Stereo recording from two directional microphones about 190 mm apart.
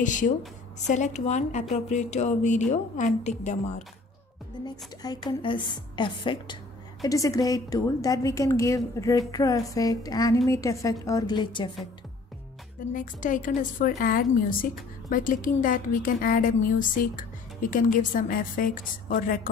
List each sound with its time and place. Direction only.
0.0 s speech: 40° left (ahead or behind)
4.6 s a woman's voice: 20° left (ahead or behind)
12.9 s a woman's voice: 45° left (ahead or behind)